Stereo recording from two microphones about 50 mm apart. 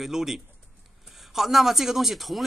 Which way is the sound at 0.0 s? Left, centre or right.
Centre.